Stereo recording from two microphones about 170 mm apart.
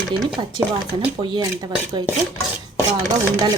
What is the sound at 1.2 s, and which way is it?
Speech, 25° right (ahead or behind).